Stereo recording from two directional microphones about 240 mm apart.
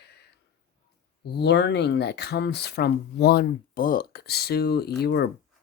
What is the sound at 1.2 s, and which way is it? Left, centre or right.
Speech, left.